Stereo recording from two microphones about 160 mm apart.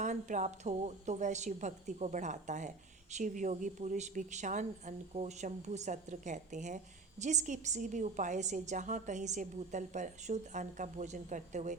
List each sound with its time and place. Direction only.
0.0 s a woman's voice: 50° right (ahead or behind)